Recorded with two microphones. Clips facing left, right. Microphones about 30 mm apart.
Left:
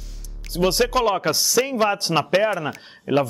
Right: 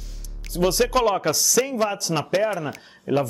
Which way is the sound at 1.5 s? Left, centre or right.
Left.